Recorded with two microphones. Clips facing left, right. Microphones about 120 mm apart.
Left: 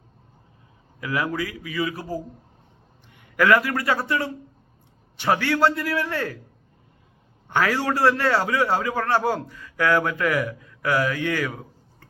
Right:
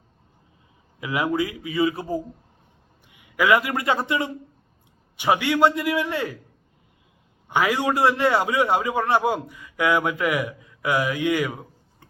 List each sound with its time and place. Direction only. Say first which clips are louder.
0.9 s a man's voice: right 2 dB; 20° right (ahead or behind)
3.1 s a man's voice: left 1 dB; 10° right (ahead or behind)
7.4 s a man's voice: right 1 dB; 15° right (ahead or behind)